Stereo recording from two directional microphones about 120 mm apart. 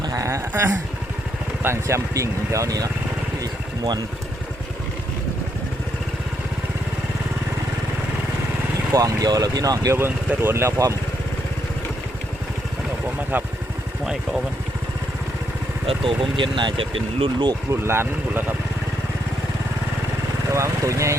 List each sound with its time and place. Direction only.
0.0 s a sound: 30° right (ahead or behind)
1.6 s speech: 25° right (ahead or behind)
3.4 s vehicle: 35° right (ahead or behind)
8.9 s speech: 30° right (ahead or behind)
13.3 s speech: 15° right (ahead or behind)
15.9 s speech: 45° right (ahead or behind)
17.7 s speech: 20° right (ahead or behind)
20.5 s speech: 25° right (ahead or behind)